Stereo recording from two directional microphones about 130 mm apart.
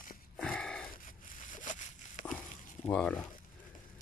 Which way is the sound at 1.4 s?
80° left.